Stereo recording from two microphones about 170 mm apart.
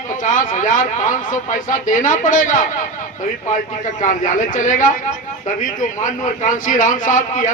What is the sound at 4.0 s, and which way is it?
A man's voice, 50° left (ahead or behind).